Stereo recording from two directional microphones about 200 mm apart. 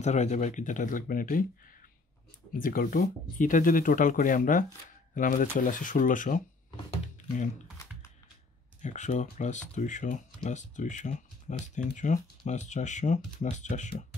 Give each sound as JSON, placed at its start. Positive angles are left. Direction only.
{"t": 0.0, "sound": "speech", "side_deg": 35}
{"t": 2.5, "sound": "speech", "side_deg": 45}
{"t": 8.8, "sound": "speech", "side_deg": 35}